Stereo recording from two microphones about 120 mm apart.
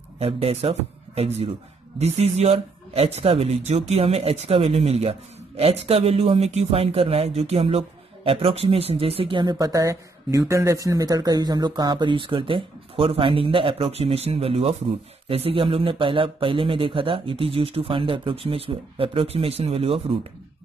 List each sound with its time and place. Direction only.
0.2 s speech: 55° right (ahead or behind)